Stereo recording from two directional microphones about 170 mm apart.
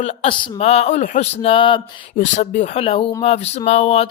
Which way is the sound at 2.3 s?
45° left (ahead or behind).